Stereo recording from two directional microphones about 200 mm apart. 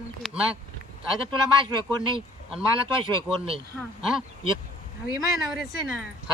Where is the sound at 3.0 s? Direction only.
25° right (ahead or behind).